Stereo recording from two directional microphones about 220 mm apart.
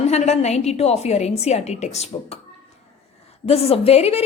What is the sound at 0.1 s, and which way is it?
A woman's voice, 30° left (ahead or behind).